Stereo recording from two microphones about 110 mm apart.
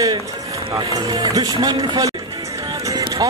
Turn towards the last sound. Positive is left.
turn(degrees=-35)  # may be behind; listen again after turning